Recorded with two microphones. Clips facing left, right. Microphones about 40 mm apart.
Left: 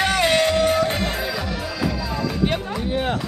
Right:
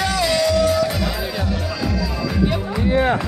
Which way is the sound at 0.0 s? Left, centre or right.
Left.